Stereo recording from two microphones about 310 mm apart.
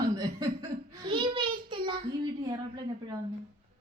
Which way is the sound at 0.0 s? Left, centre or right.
Centre.